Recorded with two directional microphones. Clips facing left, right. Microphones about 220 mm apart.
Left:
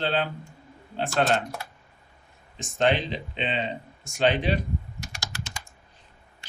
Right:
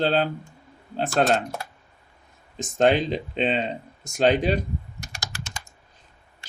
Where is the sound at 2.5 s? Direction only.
45° right (ahead or behind).